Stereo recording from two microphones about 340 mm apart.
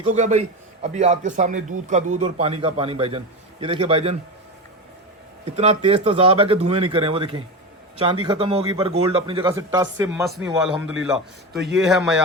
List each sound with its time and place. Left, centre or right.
0.0 s a man's voice: centre
5.5 s a man's voice: centre